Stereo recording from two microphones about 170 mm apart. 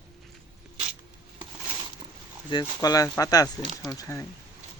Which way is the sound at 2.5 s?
25° left (ahead or behind).